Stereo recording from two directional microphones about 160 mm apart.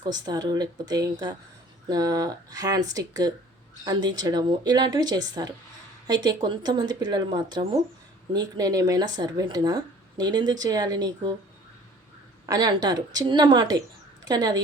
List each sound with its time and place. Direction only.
0.0 s speech: 25° right (ahead or behind)
12.5 s speech: 25° right (ahead or behind)